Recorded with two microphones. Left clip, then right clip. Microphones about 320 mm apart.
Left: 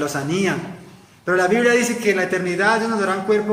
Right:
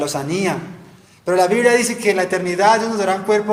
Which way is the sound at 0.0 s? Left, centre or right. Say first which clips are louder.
Right 1 dB; centre.